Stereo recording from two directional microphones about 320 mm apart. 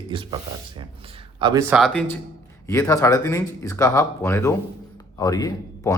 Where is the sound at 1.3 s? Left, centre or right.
Centre.